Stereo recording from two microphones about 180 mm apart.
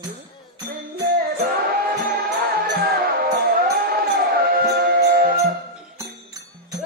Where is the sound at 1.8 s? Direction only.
55° right (ahead or behind).